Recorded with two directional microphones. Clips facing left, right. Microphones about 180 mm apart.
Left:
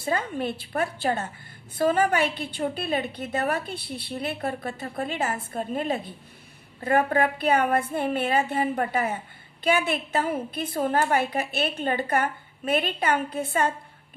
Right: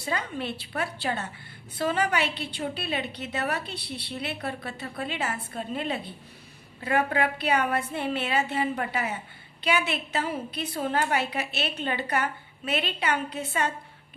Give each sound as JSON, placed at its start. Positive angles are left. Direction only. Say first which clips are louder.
{"t": 0.0, "sound": "a woman's voice", "louder": "left 4 dB", "side_deg": 50}